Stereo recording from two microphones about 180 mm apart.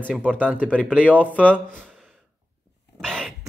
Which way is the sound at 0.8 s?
5° left (ahead or behind).